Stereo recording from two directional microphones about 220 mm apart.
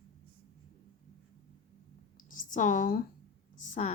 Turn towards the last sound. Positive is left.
turn(degrees=35)  # may be behind; listen again after turning